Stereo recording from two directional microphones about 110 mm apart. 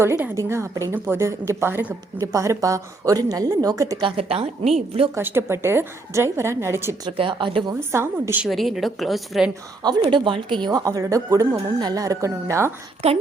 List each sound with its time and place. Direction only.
0.0 s a woman's voice: 25° right (ahead or behind)
2.1 s speech: 30° right (ahead or behind)
4.0 s speech: 60° right (ahead or behind)
5.1 s a woman's voice: 20° right (ahead or behind)
7.2 s speech: 50° right (ahead or behind)
7.7 s a woman's voice: 20° right (ahead or behind)
8.4 s a woman's voice: centre (ahead or behind)
9.8 s speech: 50° right (ahead or behind); by 12.7 s 25° right (ahead or behind)
13.0 s a woman's voice: 70° right (ahead or behind)